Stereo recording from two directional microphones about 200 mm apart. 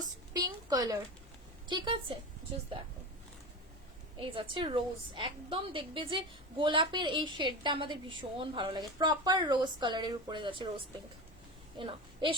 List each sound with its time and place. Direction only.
0.0 s a sound: 20° right (ahead or behind)
1.6 s a woman's voice: 25° right (ahead or behind)
4.2 s a woman's voice: 25° right (ahead or behind)
11.8 s a woman's voice: 25° right (ahead or behind)